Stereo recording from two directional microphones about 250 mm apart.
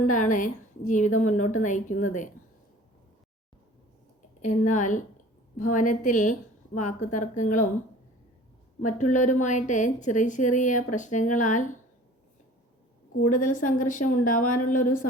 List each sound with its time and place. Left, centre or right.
0.0 s a woman's voice: left
4.4 s a woman's voice: left
8.8 s a woman's voice: left
13.2 s a woman's voice: left